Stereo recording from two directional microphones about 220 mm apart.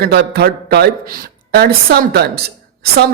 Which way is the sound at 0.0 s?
45° right (ahead or behind).